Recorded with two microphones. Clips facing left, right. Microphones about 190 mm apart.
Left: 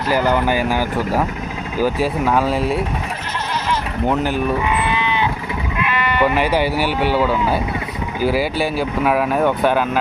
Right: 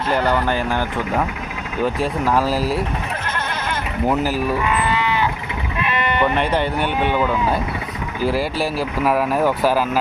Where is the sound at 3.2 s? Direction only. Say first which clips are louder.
Left 2 dB; 55° right (ahead or behind).